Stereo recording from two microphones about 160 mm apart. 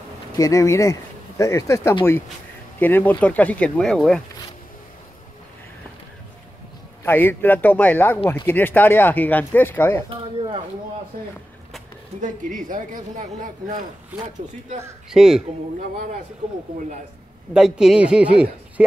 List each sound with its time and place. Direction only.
0.4 s speech: 20° left (ahead or behind); by 4.2 s 5° left (ahead or behind)
7.1 s speech: 10° left (ahead or behind)
10.0 s speech: 30° right (ahead or behind)
12.2 s a woman's voice: 55° right (ahead or behind)
15.0 s speech: 5° right (ahead or behind)
17.6 s speech: 5° right (ahead or behind)